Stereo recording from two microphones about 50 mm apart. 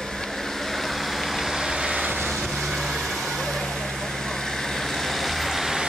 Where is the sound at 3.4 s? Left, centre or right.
Centre.